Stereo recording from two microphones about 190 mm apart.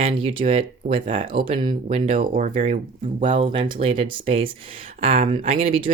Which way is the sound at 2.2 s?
45° right (ahead or behind).